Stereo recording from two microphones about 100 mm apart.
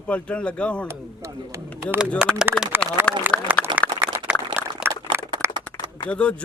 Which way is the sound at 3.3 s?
20° right (ahead or behind).